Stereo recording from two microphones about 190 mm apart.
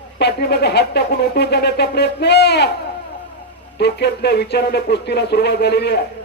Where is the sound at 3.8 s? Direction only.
60° left (ahead or behind).